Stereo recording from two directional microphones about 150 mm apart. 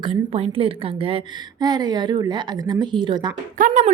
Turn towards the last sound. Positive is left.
turn(degrees=-60)  # may be behind; listen again after turning